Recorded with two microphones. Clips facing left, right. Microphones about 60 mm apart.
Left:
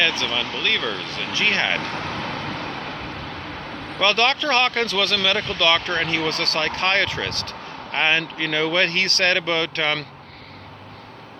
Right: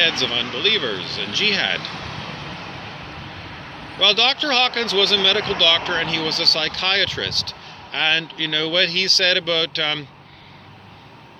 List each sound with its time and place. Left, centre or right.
0.0 s speech: left
0.8 s speech: centre
1.0 s speech: left
3.9 s speech: left